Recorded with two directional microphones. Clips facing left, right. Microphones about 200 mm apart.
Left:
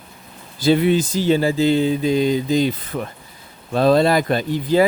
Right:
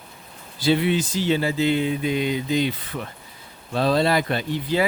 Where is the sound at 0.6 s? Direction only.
45° left (ahead or behind).